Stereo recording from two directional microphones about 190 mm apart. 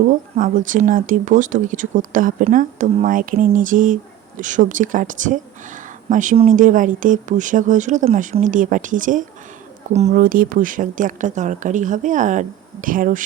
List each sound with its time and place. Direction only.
0.3 s speech: 45° right (ahead or behind)